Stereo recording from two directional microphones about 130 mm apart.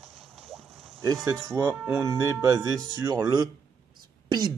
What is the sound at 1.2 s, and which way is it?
Speech, 25° right (ahead or behind).